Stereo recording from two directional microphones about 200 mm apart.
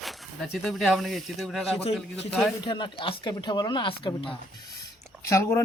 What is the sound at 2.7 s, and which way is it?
Speech, 25° left (ahead or behind).